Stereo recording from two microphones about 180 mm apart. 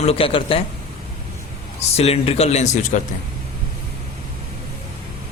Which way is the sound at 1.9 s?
35° left (ahead or behind).